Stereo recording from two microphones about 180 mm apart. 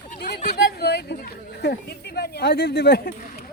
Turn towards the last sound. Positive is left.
turn(degrees=65)  # may be behind; listen again after turning